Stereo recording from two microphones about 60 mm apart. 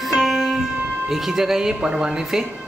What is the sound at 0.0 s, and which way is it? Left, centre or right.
Music, centre.